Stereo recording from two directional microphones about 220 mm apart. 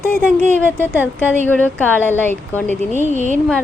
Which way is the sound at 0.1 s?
5° left (ahead or behind).